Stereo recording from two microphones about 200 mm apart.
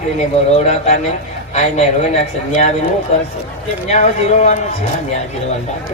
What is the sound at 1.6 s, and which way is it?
A man's voice, 35° left (ahead or behind).